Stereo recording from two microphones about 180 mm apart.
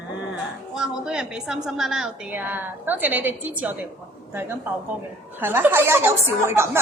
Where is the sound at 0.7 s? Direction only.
5° right (ahead or behind).